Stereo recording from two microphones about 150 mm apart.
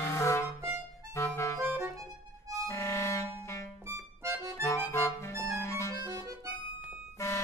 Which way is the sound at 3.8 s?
15° right (ahead or behind).